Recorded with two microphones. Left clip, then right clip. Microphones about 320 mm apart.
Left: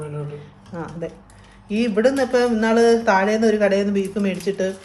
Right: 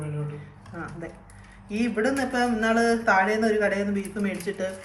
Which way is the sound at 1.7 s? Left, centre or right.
Left.